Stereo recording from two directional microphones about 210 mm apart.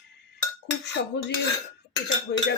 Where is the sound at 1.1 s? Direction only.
55° left (ahead or behind).